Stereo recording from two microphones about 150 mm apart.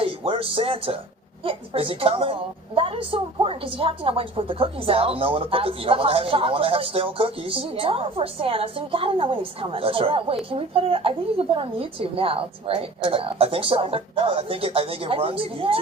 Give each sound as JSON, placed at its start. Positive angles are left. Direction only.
{"t": 0.0, "sound": "a woman's voice", "side_deg": -40}